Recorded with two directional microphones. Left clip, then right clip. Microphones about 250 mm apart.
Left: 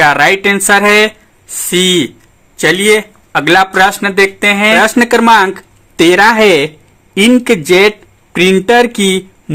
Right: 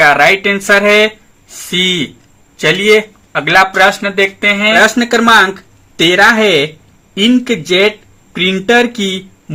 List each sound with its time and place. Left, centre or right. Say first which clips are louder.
0.0 s speech: even; left
2.6 s speech: even; left